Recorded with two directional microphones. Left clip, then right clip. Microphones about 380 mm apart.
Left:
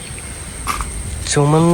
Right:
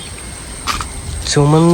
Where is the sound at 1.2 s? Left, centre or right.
Centre.